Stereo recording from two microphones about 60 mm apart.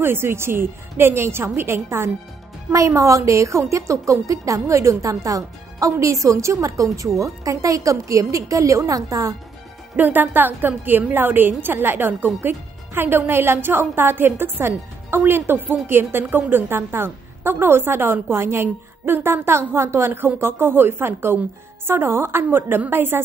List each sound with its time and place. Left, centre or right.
0.0 s a woman's voice: right
2.7 s a woman's voice: right
9.9 s a woman's voice: right
20.1 s a woman's voice: right